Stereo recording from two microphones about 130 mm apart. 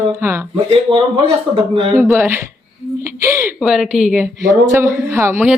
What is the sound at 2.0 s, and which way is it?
A woman's voice, 20° right (ahead or behind).